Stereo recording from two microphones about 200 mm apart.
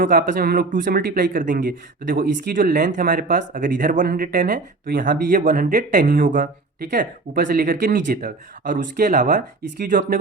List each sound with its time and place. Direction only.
0.0 s speech: 45° right (ahead or behind)